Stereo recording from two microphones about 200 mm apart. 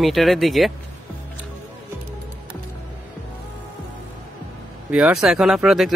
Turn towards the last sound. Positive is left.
turn(degrees=0)  # may be behind; listen again after turning